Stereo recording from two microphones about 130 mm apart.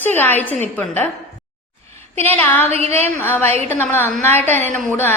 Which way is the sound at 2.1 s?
15° left (ahead or behind).